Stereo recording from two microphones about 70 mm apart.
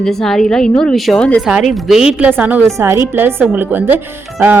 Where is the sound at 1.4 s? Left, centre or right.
Centre.